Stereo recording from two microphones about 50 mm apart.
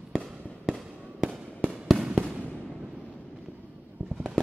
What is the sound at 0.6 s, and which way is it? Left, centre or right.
Fireworks, centre.